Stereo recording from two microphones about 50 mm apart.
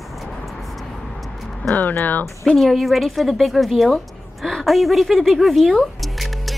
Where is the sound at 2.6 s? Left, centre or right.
Centre.